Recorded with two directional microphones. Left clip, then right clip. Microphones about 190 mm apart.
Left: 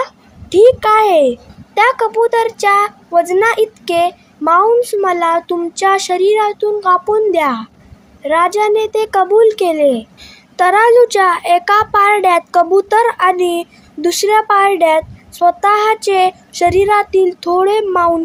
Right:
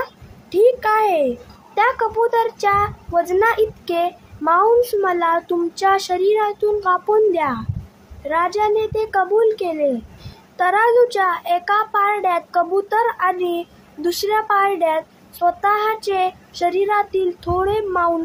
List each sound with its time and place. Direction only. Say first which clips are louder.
0.0 s a child's voice: left 7 dB; 30° left (ahead or behind)